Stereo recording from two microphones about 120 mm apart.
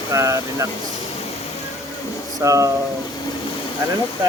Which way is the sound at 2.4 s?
25° right (ahead or behind).